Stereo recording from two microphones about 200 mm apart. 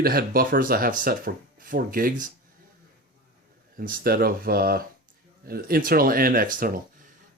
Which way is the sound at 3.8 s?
45° right (ahead or behind).